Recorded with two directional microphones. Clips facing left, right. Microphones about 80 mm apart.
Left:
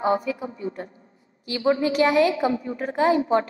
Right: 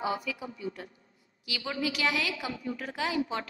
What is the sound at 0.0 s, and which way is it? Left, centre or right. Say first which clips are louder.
A woman's voice: left 9 dB; left.